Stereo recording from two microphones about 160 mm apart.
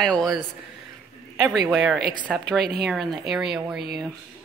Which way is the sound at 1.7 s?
5° left (ahead or behind).